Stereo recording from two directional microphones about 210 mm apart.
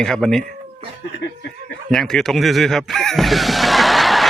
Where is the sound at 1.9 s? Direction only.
Centre (ahead or behind).